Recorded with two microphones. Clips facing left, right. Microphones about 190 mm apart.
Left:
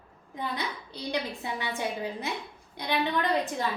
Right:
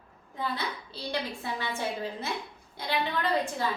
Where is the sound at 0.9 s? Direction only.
15° left (ahead or behind).